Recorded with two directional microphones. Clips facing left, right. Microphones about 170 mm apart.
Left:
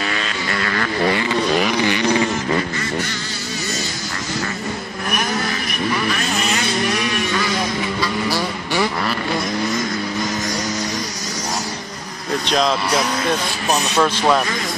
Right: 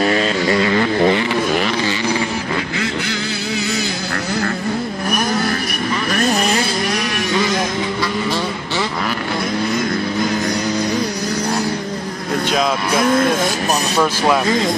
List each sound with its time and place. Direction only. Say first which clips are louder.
0.5 s vehicle: right 6 dB; 20° right (ahead or behind)
6.0 s vehicle: right 5 dB; 40° right (ahead or behind)
12.4 s vehicle: even; 5° right (ahead or behind)
13.9 s speech: even; 5° right (ahead or behind)